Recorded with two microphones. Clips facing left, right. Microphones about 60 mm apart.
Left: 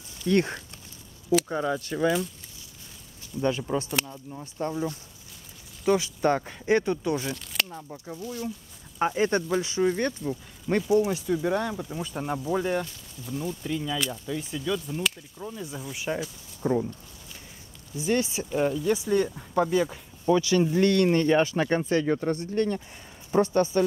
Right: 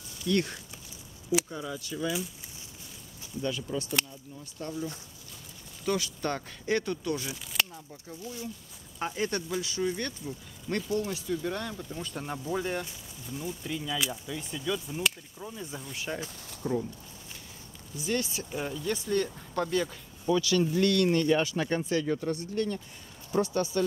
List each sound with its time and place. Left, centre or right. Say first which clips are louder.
0.3 s speech: left 5 dB; left
1.5 s speech: left 9 dB; left
3.3 s speech: left 6 dB; left
4.0 s speech: left 6 dB; left
4.6 s speech: left 6 dB; left
5.9 s speech: left 7 dB; left
7.3 s crunch: left 1 dB; centre
7.7 s speech: left 6 dB; left
10.8 s speech: left 9 dB; centre
16.6 s speech: left 5 dB; left
17.9 s speech: left 5 dB; left
18.6 s speech: left 8 dB; centre
20.2 s speech: left 4 dB; left